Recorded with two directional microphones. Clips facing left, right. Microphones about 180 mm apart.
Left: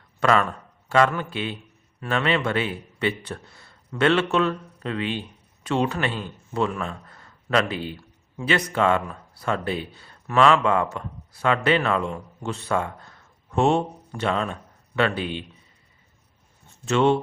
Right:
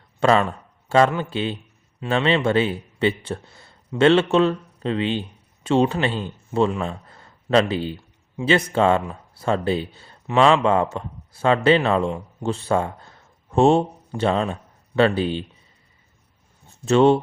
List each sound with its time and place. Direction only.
0.2 s speech: 25° right (ahead or behind)
16.8 s speech: 35° right (ahead or behind)